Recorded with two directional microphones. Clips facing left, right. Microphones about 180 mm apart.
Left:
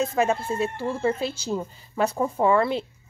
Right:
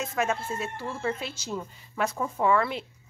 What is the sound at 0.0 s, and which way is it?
A woman's voice, 35° left (ahead or behind).